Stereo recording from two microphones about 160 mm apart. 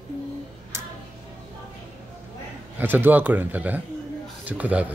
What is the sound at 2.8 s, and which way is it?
Speech, 10° right (ahead or behind).